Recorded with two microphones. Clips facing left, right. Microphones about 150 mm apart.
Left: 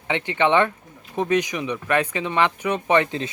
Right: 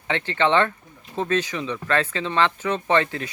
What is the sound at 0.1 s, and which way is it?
Speech, 15° left (ahead or behind).